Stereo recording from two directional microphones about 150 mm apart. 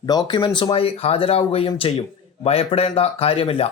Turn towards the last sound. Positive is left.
turn(degrees=40)  # may be behind; listen again after turning